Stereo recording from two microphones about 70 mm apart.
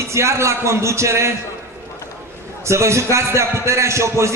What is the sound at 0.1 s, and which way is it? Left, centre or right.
A man's voice, right.